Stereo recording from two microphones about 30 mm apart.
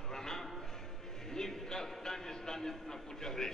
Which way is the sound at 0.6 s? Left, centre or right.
Centre.